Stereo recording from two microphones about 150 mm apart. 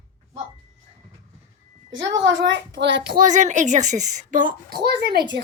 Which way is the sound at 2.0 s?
25° right (ahead or behind).